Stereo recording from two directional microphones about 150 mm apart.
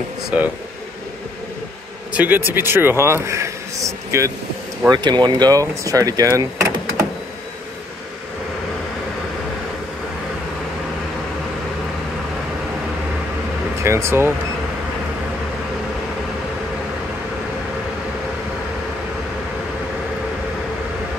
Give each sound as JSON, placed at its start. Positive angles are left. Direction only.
{"t": 0.3, "sound": "speech", "side_deg": -10}
{"t": 2.1, "sound": "speech", "side_deg": -10}
{"t": 13.8, "sound": "speech", "side_deg": -15}